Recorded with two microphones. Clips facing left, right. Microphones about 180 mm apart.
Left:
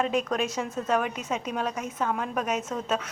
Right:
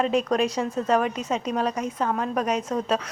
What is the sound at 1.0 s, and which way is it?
A woman's voice, 10° left (ahead or behind).